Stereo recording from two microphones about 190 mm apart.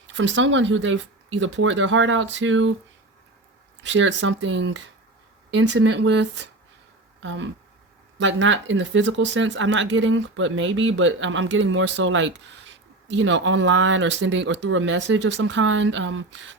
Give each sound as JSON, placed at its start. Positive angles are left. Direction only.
{"t": 0.1, "sound": "speech", "side_deg": -75}
{"t": 3.8, "sound": "speech", "side_deg": -80}